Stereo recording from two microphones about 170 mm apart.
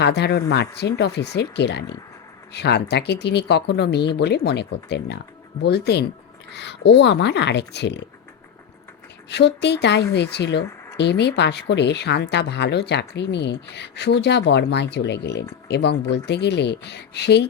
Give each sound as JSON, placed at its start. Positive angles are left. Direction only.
{"t": 0.0, "sound": "a woman's voice", "side_deg": 75}
{"t": 6.5, "sound": "speech", "side_deg": 90}
{"t": 9.3, "sound": "a woman's voice", "side_deg": 85}